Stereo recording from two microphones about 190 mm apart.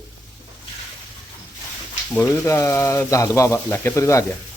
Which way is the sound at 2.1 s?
15° left (ahead or behind).